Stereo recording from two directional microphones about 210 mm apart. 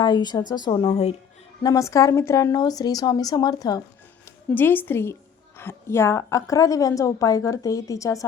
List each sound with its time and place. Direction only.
0.0 s a woman's voice: 20° left (ahead or behind)
1.6 s a woman's voice: 15° left (ahead or behind)